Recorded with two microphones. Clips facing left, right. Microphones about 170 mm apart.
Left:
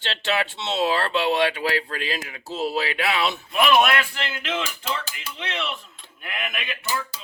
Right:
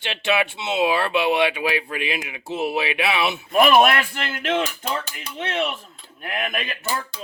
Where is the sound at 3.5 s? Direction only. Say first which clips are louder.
Right 4 dB; 45° right (ahead or behind).